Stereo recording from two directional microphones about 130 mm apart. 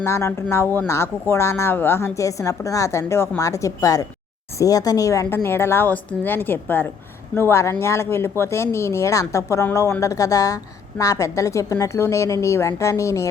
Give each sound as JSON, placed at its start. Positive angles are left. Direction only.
{"t": 0.0, "sound": "speech", "side_deg": 20}